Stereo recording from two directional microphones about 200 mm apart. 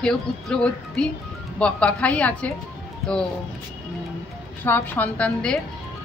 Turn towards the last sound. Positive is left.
turn(degrees=5)  # may be behind; listen again after turning